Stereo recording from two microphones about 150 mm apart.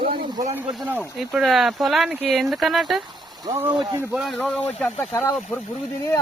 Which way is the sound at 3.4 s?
30° right (ahead or behind).